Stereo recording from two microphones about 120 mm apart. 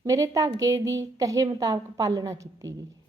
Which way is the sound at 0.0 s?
25° right (ahead or behind).